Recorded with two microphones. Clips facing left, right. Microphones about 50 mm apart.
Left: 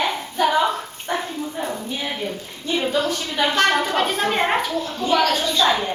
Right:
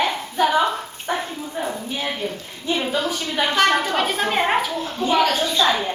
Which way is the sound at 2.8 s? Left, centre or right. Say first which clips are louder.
Left 1 dB; centre.